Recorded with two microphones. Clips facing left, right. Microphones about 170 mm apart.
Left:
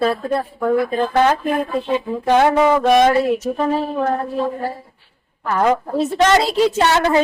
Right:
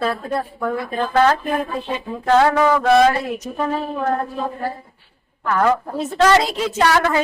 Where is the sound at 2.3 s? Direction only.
20° left (ahead or behind).